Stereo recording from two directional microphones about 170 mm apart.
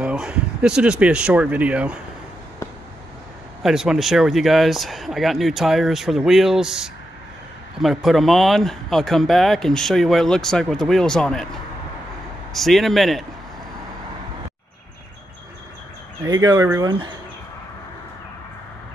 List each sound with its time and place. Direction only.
0.0 s speech: 5° right (ahead or behind)
3.6 s speech: 5° right (ahead or behind)
12.5 s speech: centre (ahead or behind)
16.3 s speech: 20° right (ahead or behind)